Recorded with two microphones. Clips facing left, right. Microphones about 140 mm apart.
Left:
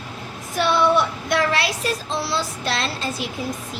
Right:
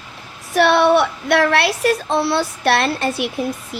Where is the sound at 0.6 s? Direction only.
65° right (ahead or behind).